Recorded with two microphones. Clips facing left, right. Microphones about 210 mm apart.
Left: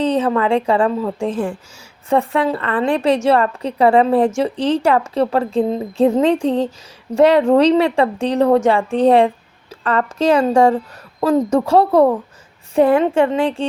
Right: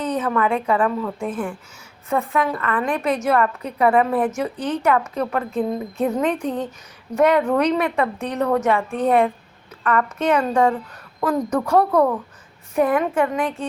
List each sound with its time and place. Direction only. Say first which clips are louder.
0.0 s a woman's voice: left 5 dB; 30° left (ahead or behind)